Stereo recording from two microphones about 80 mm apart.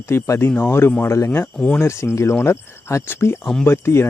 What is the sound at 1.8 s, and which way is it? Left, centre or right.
Speech, left.